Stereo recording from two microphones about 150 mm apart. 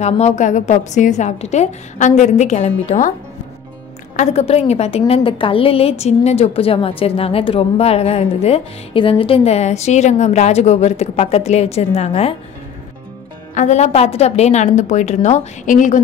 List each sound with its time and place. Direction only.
0.0 s a woman's voice: 50° left (ahead or behind)
4.2 s a woman's voice: 45° left (ahead or behind)
13.6 s a woman's voice: 50° left (ahead or behind)